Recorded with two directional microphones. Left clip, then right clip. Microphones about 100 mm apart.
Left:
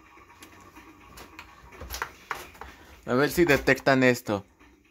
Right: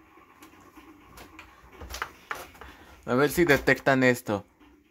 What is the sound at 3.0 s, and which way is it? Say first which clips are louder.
Speech: even; 5° right (ahead or behind).